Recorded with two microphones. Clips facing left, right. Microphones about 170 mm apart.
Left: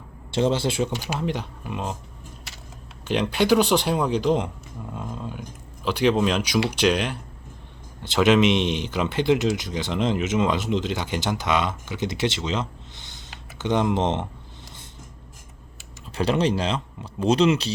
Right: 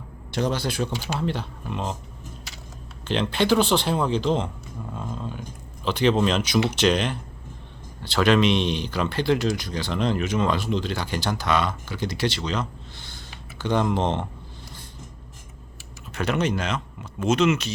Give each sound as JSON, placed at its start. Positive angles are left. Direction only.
{"t": 0.3, "sound": "speech", "side_deg": 25}
{"t": 3.1, "sound": "speech", "side_deg": 10}
{"t": 4.9, "sound": "a sound", "side_deg": 10}
{"t": 5.8, "sound": "speech", "side_deg": 10}
{"t": 8.0, "sound": "speech", "side_deg": 20}
{"t": 16.1, "sound": "speech", "side_deg": 30}